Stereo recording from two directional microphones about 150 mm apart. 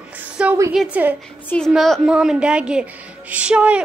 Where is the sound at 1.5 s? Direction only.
Centre (ahead or behind).